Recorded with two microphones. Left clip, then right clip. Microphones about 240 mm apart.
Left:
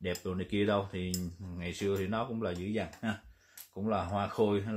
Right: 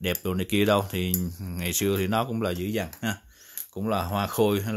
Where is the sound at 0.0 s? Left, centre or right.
Right.